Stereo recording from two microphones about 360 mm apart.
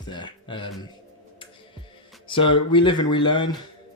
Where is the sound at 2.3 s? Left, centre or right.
Centre.